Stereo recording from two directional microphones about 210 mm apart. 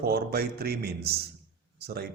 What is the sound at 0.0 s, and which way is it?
Speech, 45° right (ahead or behind).